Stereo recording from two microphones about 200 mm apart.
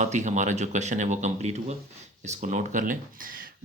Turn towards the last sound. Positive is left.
turn(degrees=-45)  # may be behind; listen again after turning